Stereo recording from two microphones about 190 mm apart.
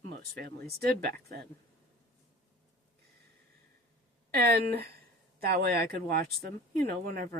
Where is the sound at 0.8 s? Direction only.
55° right (ahead or behind).